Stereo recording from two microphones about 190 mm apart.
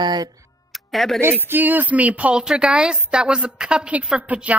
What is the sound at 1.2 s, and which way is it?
A woman's voice, 10° right (ahead or behind).